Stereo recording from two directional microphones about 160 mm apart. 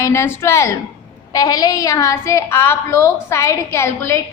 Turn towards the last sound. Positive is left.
turn(degrees=15)  # may be behind; listen again after turning